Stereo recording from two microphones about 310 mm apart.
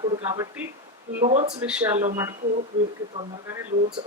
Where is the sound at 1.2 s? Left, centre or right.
Right.